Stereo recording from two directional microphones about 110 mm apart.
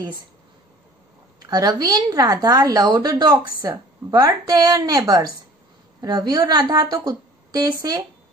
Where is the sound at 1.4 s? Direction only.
40° right (ahead or behind).